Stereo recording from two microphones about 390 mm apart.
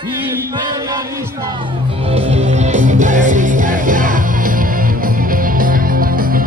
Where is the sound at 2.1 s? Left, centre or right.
Centre.